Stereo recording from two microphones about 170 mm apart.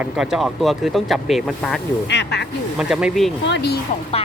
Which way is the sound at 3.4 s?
80° left.